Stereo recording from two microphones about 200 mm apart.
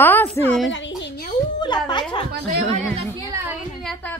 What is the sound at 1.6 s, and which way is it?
Speech, 20° left (ahead or behind).